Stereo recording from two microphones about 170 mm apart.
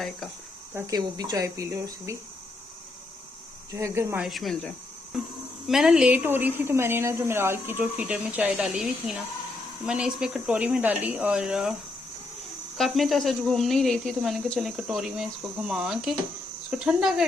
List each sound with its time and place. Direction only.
0.7 s speech: 15° right (ahead or behind)
3.7 s speech: 15° right (ahead or behind)
4.3 s speech: centre (ahead or behind)
12.7 s speech: centre (ahead or behind)